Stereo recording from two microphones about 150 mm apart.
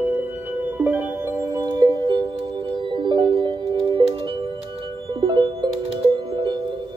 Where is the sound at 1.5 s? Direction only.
25° right (ahead or behind).